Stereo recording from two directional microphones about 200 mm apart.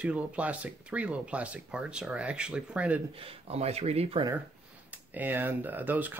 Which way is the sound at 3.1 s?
30° right (ahead or behind).